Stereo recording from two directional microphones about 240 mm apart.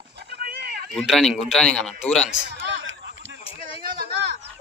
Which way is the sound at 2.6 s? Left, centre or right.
Right.